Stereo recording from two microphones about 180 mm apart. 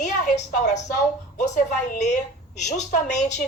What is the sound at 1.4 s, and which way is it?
A woman's voice, 40° left (ahead or behind).